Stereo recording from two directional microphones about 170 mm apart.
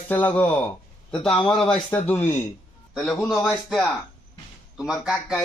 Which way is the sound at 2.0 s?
10° left (ahead or behind).